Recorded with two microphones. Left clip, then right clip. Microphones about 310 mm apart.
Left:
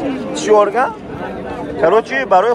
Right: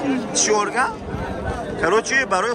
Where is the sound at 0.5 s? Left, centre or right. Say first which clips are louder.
Left 10 dB; centre.